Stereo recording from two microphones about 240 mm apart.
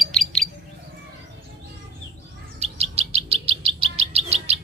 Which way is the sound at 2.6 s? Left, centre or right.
Right.